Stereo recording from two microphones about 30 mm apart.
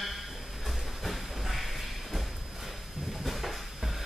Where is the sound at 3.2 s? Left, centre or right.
Centre.